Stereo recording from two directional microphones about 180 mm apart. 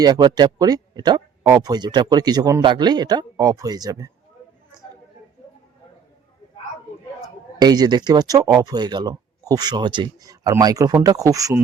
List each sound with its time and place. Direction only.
0.0 s speech: 20° right (ahead or behind)
7.6 s speech: 20° right (ahead or behind)